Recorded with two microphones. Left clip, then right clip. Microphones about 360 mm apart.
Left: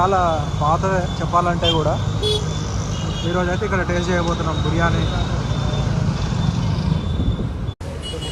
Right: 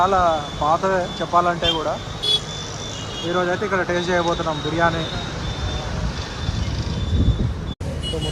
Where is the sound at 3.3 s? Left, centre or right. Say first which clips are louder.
Right 1 dB; centre.